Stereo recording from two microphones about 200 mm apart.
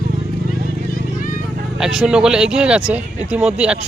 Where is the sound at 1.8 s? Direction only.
5° right (ahead or behind).